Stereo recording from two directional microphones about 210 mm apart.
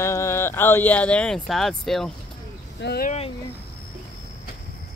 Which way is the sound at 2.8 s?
50° left (ahead or behind).